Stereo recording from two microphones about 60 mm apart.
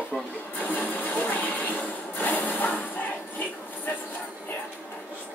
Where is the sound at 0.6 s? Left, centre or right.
Left.